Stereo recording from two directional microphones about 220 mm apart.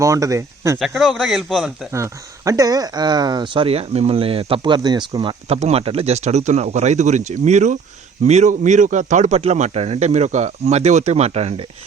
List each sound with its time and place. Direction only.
0.0 s speech: 15° right (ahead or behind)
0.8 s speech: centre (ahead or behind)
1.9 s a man's voice: 15° right (ahead or behind)